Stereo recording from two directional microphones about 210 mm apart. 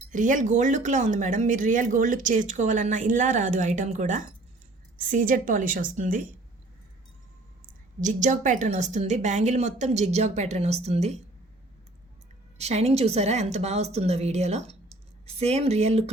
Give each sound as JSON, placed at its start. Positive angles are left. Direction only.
{"t": 0.1, "sound": "speech", "side_deg": -35}
{"t": 8.0, "sound": "speech", "side_deg": -35}
{"t": 12.5, "sound": "speech", "side_deg": -30}